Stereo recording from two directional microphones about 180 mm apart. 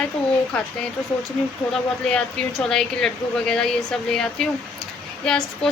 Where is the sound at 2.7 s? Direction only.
5° left (ahead or behind).